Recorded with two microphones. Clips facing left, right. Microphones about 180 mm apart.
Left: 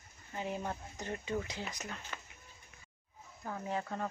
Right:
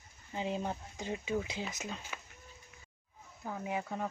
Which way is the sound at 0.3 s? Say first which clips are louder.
Right 2 dB; 20° right (ahead or behind).